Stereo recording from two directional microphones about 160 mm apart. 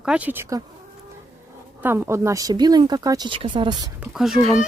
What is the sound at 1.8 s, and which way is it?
Speech, 15° right (ahead or behind).